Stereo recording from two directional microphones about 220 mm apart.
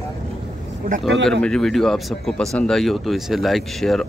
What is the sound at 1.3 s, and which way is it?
Speech, 5° left (ahead or behind).